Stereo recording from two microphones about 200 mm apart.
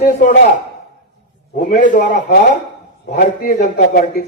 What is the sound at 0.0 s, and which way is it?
Speech, 40° left (ahead or behind).